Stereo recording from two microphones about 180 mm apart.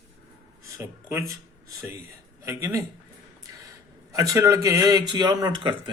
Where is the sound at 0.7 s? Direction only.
15° right (ahead or behind).